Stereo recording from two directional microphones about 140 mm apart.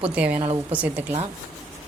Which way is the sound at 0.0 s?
10° right (ahead or behind).